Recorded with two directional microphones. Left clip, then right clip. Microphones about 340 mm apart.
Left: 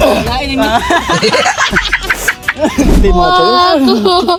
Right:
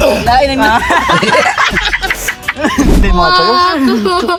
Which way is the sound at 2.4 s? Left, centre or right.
Centre.